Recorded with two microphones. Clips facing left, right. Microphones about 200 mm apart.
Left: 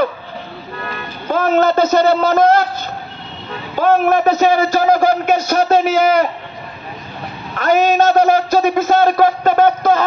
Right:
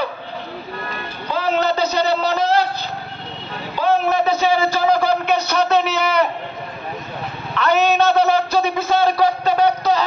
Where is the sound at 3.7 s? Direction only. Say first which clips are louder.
Left 4 dB; 50° left (ahead or behind).